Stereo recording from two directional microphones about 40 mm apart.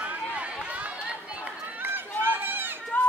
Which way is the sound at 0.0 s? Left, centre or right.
Right.